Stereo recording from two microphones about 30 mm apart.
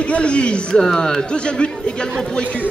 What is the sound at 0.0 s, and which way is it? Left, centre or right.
Speech, left.